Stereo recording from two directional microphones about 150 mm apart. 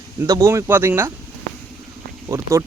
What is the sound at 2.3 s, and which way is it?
Speech, 20° right (ahead or behind).